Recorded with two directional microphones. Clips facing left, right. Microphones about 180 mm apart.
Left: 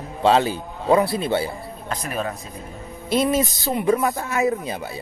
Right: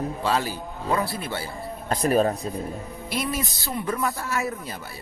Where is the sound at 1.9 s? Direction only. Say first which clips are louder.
Right 7 dB; 35° right (ahead or behind).